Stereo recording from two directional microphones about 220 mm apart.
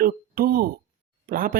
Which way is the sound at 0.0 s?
45° right (ahead or behind).